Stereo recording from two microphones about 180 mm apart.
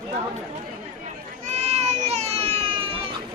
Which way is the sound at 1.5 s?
35° right (ahead or behind).